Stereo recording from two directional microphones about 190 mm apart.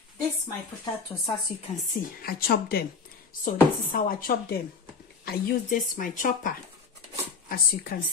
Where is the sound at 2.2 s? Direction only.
50° left (ahead or behind).